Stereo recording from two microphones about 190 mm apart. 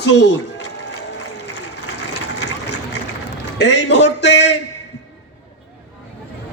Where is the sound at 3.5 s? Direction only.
65° left (ahead or behind).